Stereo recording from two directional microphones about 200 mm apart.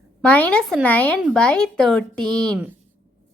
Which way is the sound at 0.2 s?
5° left (ahead or behind).